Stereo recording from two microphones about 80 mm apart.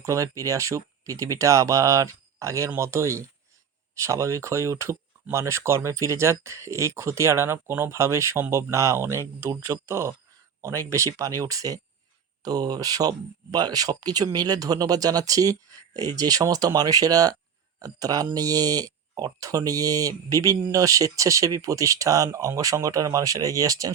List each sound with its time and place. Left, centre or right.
0.0 s speech: right